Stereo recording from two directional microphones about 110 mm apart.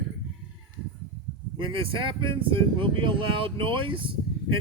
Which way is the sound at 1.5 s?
50° right (ahead or behind).